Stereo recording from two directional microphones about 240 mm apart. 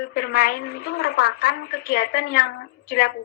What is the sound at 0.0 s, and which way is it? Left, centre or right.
A woman's voice, left.